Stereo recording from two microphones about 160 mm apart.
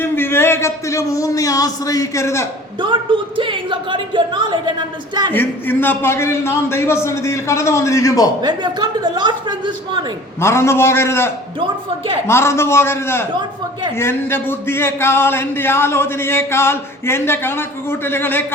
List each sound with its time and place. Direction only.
0.0 s speech: 15° left (ahead or behind)
2.8 s a woman's voice: 30° right (ahead or behind)
5.3 s speech: 10° left (ahead or behind)
8.4 s speech: 30° right (ahead or behind)
10.4 s speech: 15° left (ahead or behind)
12.3 s speech: 15° left (ahead or behind)